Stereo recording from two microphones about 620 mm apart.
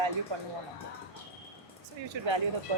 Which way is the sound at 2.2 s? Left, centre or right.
Right.